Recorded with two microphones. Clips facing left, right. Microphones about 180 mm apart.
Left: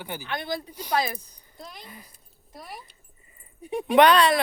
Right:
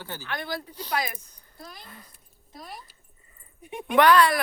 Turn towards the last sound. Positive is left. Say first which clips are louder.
# left 1 dB
turn(degrees=25)  # may be behind; listen again after turning